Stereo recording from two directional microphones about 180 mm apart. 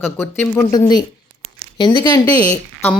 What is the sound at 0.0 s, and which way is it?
Speech, 10° left (ahead or behind).